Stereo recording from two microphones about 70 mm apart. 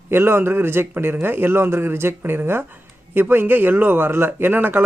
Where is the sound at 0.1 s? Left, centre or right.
Right.